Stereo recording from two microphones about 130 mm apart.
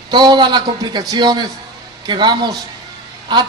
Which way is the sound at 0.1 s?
35° right (ahead or behind).